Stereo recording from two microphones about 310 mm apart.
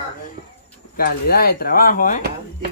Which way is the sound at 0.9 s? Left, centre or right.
Left.